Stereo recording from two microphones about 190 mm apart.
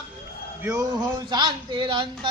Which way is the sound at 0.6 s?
15° right (ahead or behind).